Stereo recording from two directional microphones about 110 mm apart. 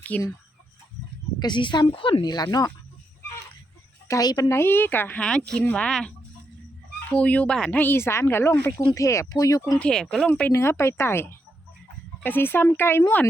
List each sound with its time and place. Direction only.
0.1 s speech: 10° left (ahead or behind)
1.4 s speech: 45° left (ahead or behind)
2.2 s speech: 35° left (ahead or behind)
4.1 s speech: 35° left (ahead or behind)
9.7 s speech: 10° left (ahead or behind)
10.2 s speech: 15° left (ahead or behind)